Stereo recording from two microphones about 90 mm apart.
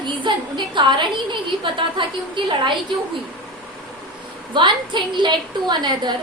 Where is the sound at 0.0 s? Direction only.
60° right (ahead or behind).